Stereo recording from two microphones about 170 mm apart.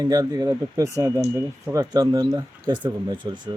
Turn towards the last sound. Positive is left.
turn(degrees=-25)  # may be behind; listen again after turning